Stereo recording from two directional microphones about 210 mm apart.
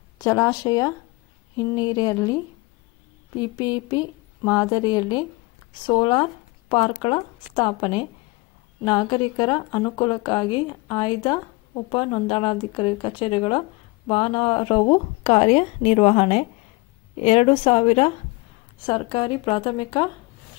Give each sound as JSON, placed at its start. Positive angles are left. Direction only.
{"t": 0.2, "sound": "speech", "side_deg": 15}
{"t": 3.3, "sound": "speech", "side_deg": 20}